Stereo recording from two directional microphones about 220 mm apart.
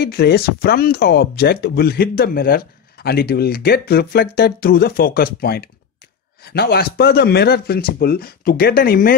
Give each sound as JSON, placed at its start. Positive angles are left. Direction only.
{"t": 0.0, "sound": "speech", "side_deg": 45}